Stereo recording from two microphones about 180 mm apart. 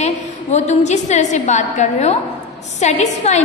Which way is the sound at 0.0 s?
40° left (ahead or behind).